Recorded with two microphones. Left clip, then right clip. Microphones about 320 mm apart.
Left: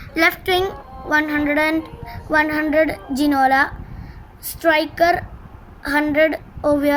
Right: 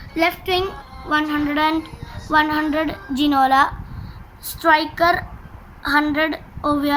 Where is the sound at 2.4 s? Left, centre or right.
Centre.